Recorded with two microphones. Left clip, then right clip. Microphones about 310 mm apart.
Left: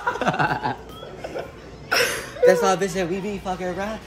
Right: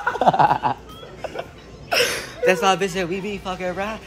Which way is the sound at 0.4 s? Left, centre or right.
Centre.